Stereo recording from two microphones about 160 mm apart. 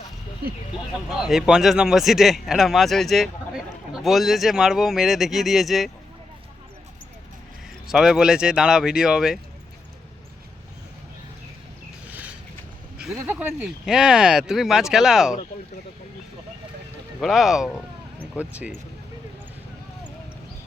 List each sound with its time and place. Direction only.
1.1 s speech: 5° right (ahead or behind)
7.9 s speech: 5° right (ahead or behind)
12.1 s a sound: 10° right (ahead or behind)
13.0 s speech: 5° right (ahead or behind)
17.2 s speech: centre (ahead or behind)